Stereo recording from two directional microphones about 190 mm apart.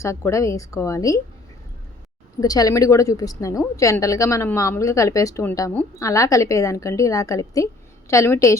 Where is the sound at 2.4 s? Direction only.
20° left (ahead or behind).